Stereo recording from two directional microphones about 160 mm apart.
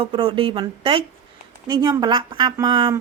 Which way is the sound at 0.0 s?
35° right (ahead or behind).